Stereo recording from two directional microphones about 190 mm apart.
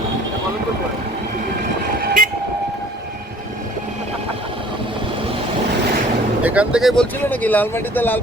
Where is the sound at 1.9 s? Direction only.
50° right (ahead or behind).